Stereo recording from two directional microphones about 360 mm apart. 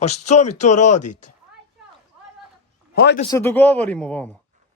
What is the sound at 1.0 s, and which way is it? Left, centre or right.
Speech, left.